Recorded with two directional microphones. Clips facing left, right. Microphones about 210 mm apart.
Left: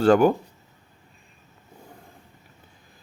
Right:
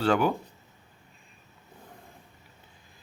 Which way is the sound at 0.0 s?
45° left (ahead or behind).